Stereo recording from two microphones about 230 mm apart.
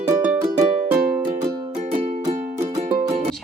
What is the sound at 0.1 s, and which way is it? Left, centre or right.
Music, centre.